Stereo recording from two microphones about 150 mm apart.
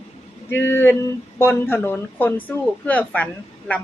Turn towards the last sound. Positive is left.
turn(degrees=10)  # may be behind; listen again after turning